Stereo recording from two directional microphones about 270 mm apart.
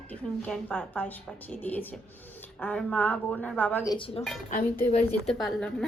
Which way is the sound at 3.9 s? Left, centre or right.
Centre.